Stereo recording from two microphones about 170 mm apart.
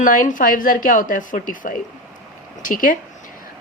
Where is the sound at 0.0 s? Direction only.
50° left (ahead or behind).